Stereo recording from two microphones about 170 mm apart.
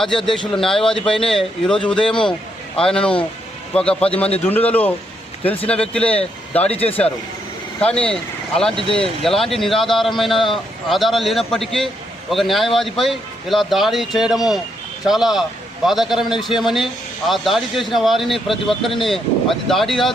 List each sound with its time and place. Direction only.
0.0 s a man's voice: 5° left (ahead or behind)
4.0 s a man's voice: 35° left (ahead or behind)
4.4 s speech: 10° left (ahead or behind)
7.8 s a man's voice: 5° left (ahead or behind)